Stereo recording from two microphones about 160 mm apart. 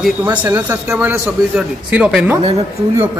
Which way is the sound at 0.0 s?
10° right (ahead or behind).